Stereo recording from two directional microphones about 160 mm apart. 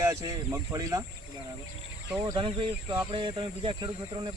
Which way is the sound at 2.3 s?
30° right (ahead or behind).